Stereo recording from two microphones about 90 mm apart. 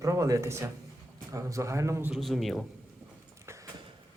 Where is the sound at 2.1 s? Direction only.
Centre (ahead or behind).